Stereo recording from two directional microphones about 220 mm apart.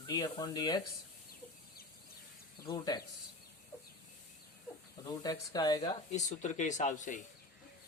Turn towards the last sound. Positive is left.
turn(degrees=35)  # may be behind; listen again after turning